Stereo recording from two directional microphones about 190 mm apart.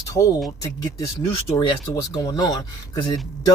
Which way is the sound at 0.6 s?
15° left (ahead or behind).